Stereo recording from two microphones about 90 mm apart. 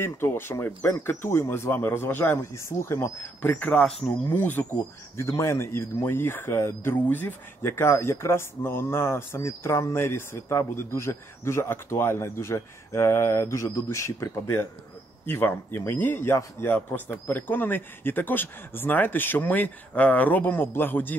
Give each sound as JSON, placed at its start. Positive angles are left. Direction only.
{"t": 0.0, "sound": "speech", "side_deg": 25}
{"t": 3.5, "sound": "speech", "side_deg": 15}